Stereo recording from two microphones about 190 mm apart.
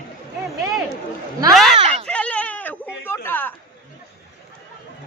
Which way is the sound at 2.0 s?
5° left (ahead or behind).